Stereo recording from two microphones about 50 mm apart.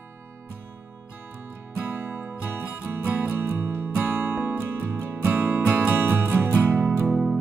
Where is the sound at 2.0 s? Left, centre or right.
Centre.